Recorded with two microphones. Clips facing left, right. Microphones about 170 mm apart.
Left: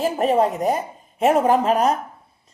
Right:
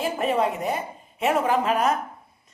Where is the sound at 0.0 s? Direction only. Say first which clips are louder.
Left 5 dB; 40° left (ahead or behind).